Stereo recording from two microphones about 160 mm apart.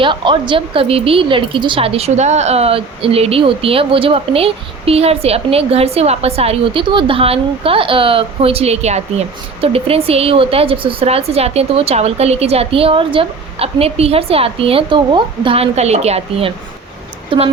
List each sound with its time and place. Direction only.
0.0 s speech: 30° right (ahead or behind)